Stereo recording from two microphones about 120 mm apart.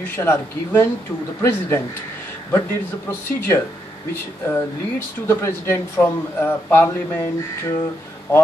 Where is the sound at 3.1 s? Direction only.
20° left (ahead or behind).